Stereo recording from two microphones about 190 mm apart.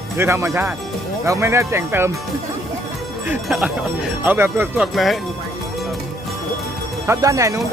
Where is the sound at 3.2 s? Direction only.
5° right (ahead or behind).